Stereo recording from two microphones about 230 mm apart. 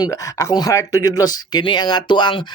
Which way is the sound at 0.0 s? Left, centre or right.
Centre.